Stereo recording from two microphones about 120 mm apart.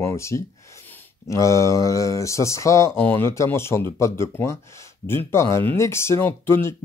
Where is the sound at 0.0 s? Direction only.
25° left (ahead or behind).